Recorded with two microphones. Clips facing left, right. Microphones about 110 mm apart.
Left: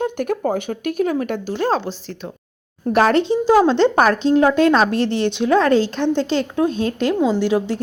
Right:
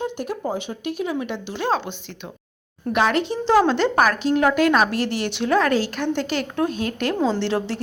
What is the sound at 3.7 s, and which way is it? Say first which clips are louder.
A woman's voice: left 4 dB; 25° left (ahead or behind).